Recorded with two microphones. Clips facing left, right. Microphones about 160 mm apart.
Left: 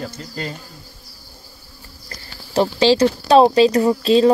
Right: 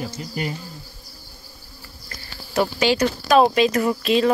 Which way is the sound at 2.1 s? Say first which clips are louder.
Left 2 dB; 30° left (ahead or behind).